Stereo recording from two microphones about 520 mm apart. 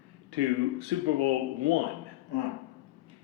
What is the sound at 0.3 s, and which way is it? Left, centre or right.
Speech, right.